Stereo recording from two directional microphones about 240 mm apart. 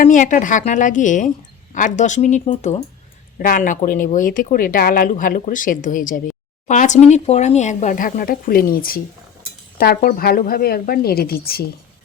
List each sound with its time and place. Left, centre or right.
0.0 s speech: left